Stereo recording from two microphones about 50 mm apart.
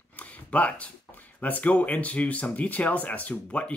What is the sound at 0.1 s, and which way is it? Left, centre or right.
Speech, left.